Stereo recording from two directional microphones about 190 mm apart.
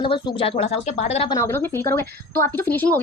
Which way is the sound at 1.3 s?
15° left (ahead or behind).